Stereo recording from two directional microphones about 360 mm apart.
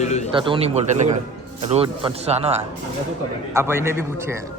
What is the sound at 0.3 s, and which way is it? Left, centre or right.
Speech, centre.